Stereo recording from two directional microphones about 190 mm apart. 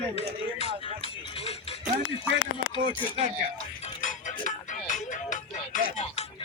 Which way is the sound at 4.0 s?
40° left (ahead or behind).